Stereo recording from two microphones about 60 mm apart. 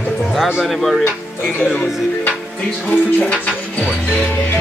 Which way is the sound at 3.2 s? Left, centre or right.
Left.